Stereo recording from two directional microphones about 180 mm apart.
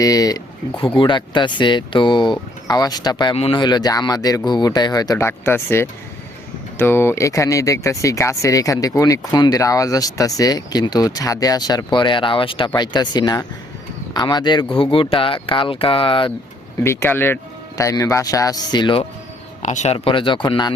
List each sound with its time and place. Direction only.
0.0 s speech: 20° left (ahead or behind)
16.8 s speech: 15° left (ahead or behind)
19.6 s speech: 40° left (ahead or behind)
20.1 s speech: 30° left (ahead or behind)